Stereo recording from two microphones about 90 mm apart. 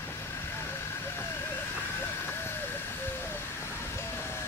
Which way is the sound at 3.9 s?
30° left (ahead or behind).